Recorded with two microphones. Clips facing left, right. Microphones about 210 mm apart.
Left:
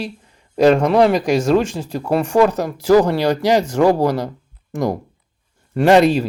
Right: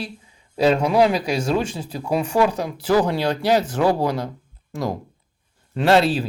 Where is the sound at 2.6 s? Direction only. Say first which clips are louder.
Left 6 dB; 10° left (ahead or behind).